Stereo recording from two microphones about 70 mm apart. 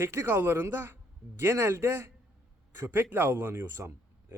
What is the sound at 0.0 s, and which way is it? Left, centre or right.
Speech, right.